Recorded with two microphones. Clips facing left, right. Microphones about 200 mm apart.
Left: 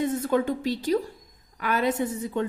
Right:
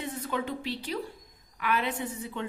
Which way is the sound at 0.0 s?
45° left (ahead or behind).